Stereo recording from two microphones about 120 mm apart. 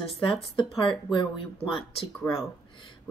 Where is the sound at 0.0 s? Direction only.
45° left (ahead or behind).